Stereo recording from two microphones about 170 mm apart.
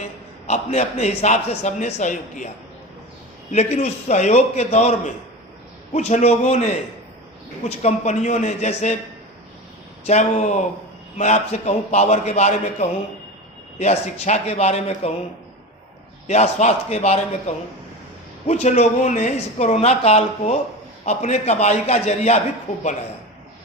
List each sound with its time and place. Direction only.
0.4 s speech: 40° left (ahead or behind)
3.5 s a man's voice: 40° left (ahead or behind)
10.0 s a man's voice: 40° left (ahead or behind)
16.2 s speech: 40° left (ahead or behind)